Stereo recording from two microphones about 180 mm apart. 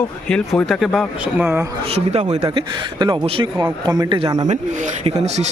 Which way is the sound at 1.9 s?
35° right (ahead or behind).